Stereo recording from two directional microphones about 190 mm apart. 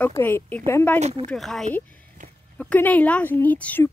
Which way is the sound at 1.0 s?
35° right (ahead or behind).